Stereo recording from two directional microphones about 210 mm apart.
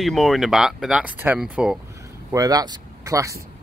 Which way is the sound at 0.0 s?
Centre (ahead or behind).